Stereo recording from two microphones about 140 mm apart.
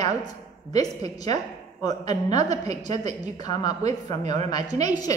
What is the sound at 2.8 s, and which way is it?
Speech, 55° right (ahead or behind).